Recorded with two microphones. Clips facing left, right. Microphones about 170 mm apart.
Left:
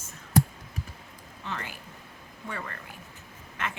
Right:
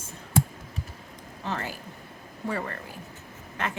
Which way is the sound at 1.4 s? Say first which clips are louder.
Right 5 dB; 40° right (ahead or behind).